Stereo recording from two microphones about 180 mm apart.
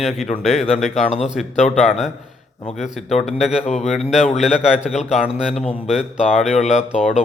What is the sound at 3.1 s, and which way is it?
Speech, 35° left (ahead or behind).